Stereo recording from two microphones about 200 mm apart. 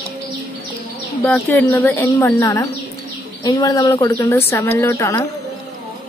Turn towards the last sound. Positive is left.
turn(degrees=15)  # may be behind; listen again after turning